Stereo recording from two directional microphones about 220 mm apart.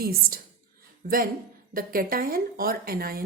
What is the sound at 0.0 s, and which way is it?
A woman's voice, 45° right (ahead or behind).